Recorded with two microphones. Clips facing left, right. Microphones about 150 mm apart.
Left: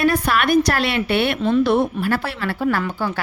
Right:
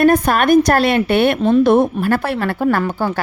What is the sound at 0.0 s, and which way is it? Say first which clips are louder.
A woman's voice: right 5 dB; 45° right (ahead or behind).